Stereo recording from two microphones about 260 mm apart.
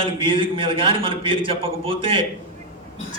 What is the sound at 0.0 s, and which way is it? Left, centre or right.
A man's voice, centre.